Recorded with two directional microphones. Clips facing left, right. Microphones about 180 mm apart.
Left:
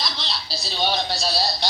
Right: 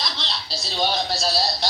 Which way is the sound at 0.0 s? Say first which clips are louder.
Even; centre (ahead or behind).